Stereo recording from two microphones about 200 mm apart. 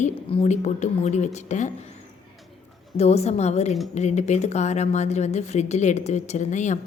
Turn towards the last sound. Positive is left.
turn(degrees=35)  # may be behind; listen again after turning